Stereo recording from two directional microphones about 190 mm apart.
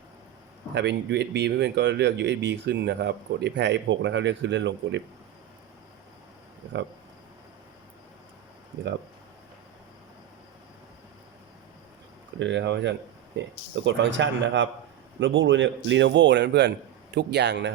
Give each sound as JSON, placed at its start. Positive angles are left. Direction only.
{"t": 0.7, "sound": "speech", "side_deg": -65}
{"t": 12.4, "sound": "a man's voice", "side_deg": -70}